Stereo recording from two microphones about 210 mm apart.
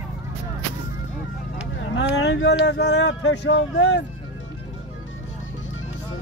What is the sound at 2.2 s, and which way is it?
Speech, 55° left (ahead or behind).